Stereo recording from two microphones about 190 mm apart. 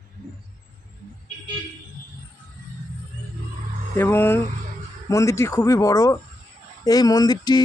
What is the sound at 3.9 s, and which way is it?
Speech, 10° left (ahead or behind).